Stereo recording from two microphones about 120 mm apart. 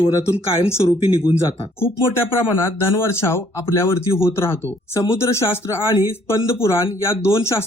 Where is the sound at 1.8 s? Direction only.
20° left (ahead or behind).